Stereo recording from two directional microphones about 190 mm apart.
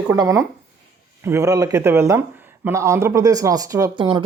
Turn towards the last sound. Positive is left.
turn(degrees=-25)  # may be behind; listen again after turning